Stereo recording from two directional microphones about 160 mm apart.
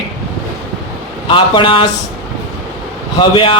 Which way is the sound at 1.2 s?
30° left (ahead or behind).